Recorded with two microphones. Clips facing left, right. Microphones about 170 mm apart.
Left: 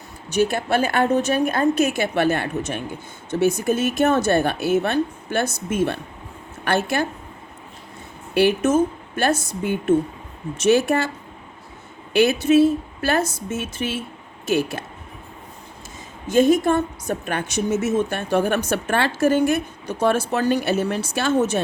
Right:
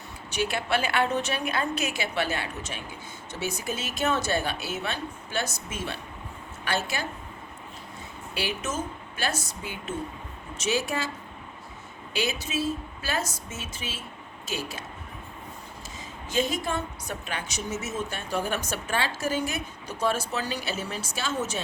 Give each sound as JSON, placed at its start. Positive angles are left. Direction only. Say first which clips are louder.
{"t": 0.3, "sound": "a woman's voice", "louder": "left 8 dB", "side_deg": 45}
{"t": 8.3, "sound": "a woman's voice", "louder": "left 14 dB", "side_deg": 55}
{"t": 12.1, "sound": "a woman's voice", "louder": "left 14 dB", "side_deg": 60}
{"t": 16.2, "sound": "a woman's voice", "louder": "left 12 dB", "side_deg": 50}